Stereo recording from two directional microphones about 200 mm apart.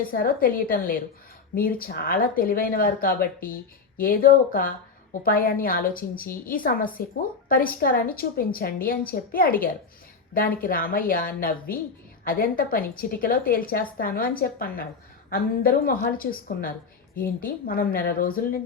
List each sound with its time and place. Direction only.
0.0 s a woman's voice: 45° left (ahead or behind)